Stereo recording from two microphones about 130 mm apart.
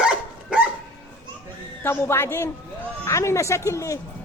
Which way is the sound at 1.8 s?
20° left (ahead or behind).